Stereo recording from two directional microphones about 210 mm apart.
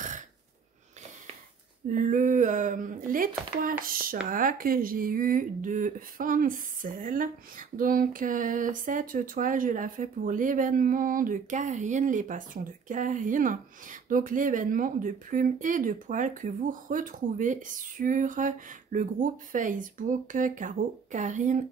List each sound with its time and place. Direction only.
1.9 s speech: 40° right (ahead or behind)